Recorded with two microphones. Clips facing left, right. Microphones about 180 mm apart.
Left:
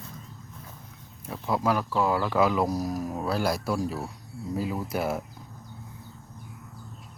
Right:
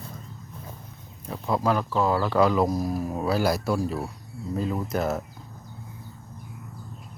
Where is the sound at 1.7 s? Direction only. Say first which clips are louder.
Right 1 dB; 5° left (ahead or behind).